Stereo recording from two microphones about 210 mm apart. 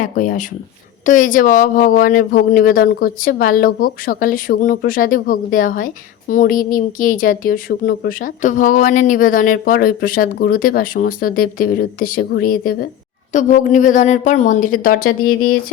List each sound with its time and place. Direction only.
0.0 s speech: 40° left (ahead or behind)
15.2 s speech: 90° left